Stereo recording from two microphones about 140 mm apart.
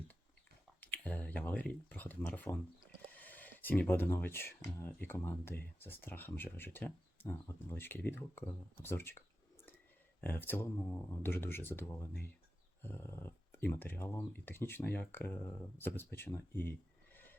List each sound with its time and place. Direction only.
0.8 s speech: 10° left (ahead or behind)